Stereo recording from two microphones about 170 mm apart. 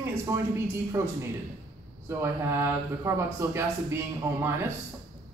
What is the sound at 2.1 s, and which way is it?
Speech, 15° right (ahead or behind).